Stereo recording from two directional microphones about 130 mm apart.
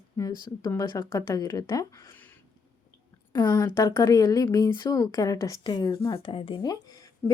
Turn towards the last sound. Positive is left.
turn(degrees=15)  # may be behind; listen again after turning